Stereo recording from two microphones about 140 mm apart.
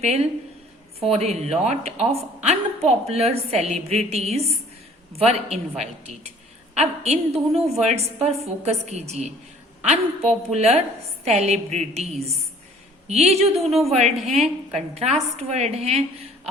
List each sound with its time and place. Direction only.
0.0 s speech: 50° right (ahead or behind)